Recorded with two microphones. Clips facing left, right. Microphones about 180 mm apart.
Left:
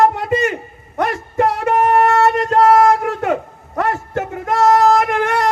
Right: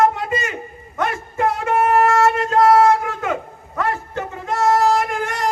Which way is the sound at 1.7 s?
35° left (ahead or behind).